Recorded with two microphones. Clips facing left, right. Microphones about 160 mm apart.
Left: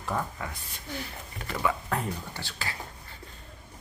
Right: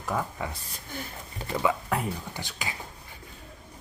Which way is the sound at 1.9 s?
10° right (ahead or behind).